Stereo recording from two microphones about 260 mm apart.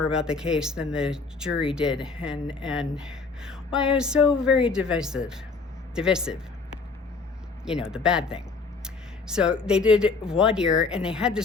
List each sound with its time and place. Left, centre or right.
0.1 s speech: centre
7.6 s speech: centre
8.8 s a sound: centre
9.6 s speech: centre